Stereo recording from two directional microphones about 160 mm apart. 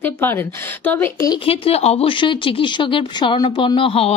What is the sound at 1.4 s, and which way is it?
Speech, 40° left (ahead or behind).